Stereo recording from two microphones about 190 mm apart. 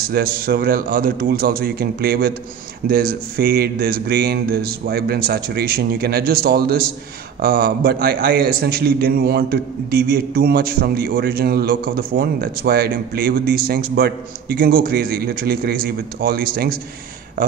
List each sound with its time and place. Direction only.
0.1 s a man's voice: 55° right (ahead or behind)